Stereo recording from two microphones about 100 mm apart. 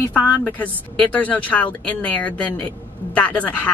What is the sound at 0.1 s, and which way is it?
A woman's voice, 15° left (ahead or behind).